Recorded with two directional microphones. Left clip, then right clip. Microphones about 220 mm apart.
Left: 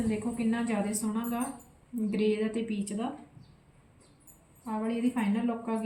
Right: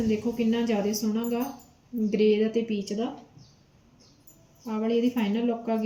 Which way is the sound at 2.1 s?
15° left (ahead or behind).